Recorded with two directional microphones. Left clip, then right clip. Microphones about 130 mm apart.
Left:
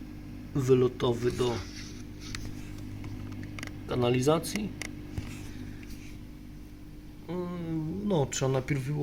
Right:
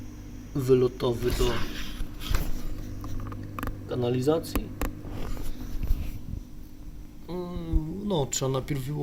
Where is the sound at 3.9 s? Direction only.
15° left (ahead or behind).